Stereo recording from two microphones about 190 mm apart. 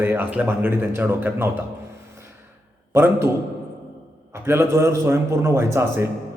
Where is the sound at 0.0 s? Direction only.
10° right (ahead or behind).